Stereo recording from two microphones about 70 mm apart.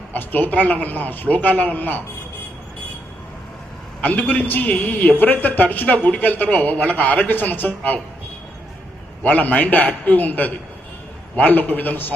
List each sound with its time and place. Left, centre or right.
0.1 s a man's voice: left
4.0 s a man's voice: left
9.2 s a man's voice: left